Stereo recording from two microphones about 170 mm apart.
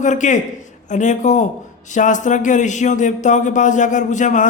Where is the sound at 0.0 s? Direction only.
45° left (ahead or behind).